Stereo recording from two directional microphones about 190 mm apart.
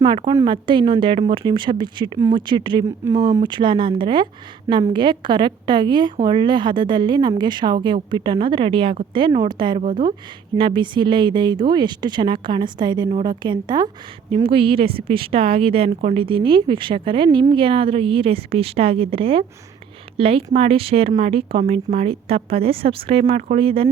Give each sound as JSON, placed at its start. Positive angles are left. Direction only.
{"t": 0.0, "sound": "a woman's voice", "side_deg": -25}